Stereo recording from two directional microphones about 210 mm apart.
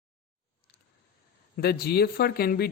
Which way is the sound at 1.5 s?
50° left (ahead or behind).